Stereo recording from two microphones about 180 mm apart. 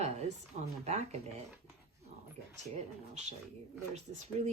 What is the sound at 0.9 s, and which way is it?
Speech, 35° right (ahead or behind).